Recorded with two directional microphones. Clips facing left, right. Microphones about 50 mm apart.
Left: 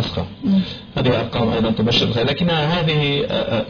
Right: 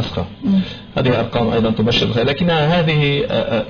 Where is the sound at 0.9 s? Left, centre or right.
Right.